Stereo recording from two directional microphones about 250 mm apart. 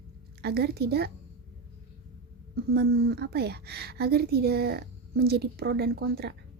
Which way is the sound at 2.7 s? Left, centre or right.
Right.